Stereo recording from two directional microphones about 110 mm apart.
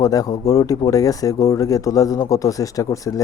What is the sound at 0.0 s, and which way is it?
A man's voice, 35° left (ahead or behind).